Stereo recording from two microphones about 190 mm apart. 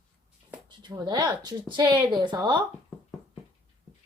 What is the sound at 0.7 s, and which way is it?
Speech, 25° right (ahead or behind).